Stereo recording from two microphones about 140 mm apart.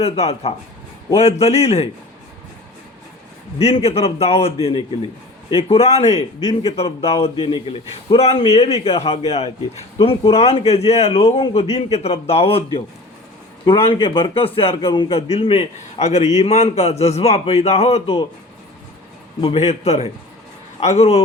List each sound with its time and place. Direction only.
0.0 s a man's voice: 45° left (ahead or behind)
3.6 s a man's voice: 45° left (ahead or behind)
5.5 s a man's voice: 45° left (ahead or behind)
19.4 s a man's voice: 45° left (ahead or behind)